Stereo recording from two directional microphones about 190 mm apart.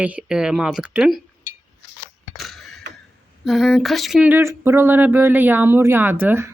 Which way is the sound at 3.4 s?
Centre (ahead or behind).